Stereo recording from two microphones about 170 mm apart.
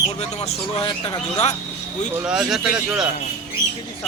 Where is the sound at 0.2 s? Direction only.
40° left (ahead or behind).